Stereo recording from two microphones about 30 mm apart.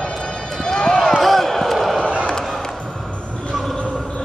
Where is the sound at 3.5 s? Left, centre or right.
Centre.